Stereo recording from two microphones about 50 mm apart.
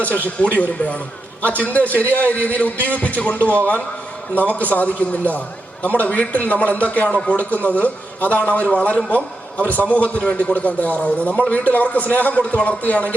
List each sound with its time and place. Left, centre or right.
0.3 s a man's voice: left